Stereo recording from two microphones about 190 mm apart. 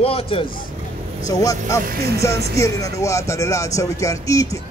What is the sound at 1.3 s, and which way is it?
A man's voice, 15° left (ahead or behind).